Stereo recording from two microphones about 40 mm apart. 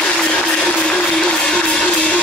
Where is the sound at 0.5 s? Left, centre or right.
Left.